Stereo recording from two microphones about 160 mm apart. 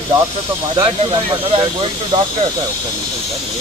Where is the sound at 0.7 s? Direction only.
25° right (ahead or behind).